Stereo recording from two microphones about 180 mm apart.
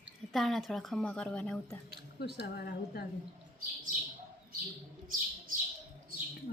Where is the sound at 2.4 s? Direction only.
65° left (ahead or behind).